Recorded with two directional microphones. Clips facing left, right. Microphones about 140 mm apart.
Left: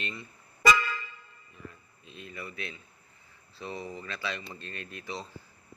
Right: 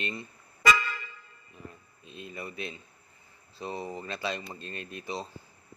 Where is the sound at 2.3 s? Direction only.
35° right (ahead or behind).